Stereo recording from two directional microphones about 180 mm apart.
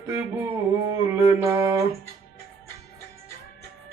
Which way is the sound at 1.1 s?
15° right (ahead or behind).